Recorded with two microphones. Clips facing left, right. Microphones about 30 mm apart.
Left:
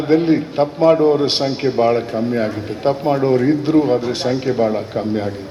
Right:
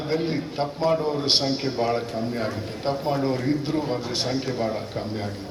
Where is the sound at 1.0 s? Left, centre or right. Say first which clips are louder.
Left 8 dB; left.